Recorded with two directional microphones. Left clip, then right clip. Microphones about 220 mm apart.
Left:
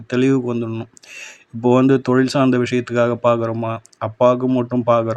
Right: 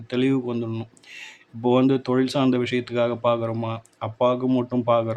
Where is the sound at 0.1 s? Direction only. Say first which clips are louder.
Left 6 dB; 15° left (ahead or behind).